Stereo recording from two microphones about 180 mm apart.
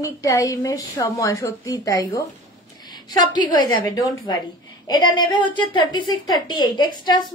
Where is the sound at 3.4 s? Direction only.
20° left (ahead or behind).